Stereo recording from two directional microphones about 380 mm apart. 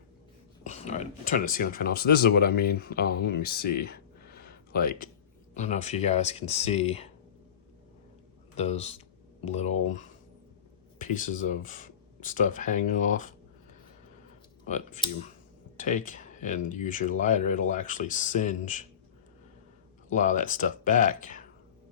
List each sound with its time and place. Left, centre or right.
0.6 s speech: centre
8.5 s speech: centre
14.6 s speech: centre
20.1 s speech: centre